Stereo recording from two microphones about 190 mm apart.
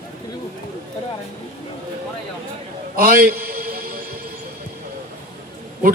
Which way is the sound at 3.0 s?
50° right (ahead or behind).